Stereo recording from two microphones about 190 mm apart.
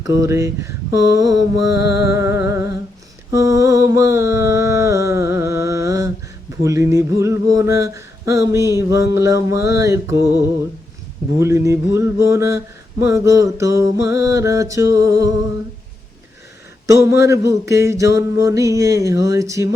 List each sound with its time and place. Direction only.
0.0 s mantra: 15° right (ahead or behind)
3.3 s a sound: 15° right (ahead or behind)
6.6 s mantra: 15° right (ahead or behind)
11.3 s mantra: 15° right (ahead or behind)
16.8 s mantra: 15° right (ahead or behind)